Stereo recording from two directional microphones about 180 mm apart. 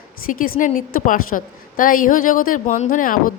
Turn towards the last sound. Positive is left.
turn(degrees=50)  # may be behind; listen again after turning